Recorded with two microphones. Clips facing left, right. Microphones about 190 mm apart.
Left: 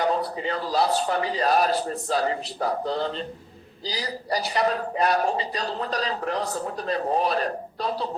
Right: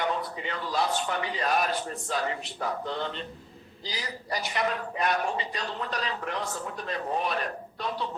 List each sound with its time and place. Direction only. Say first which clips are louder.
0.0 s a man's voice: left 6 dB; 35° left (ahead or behind)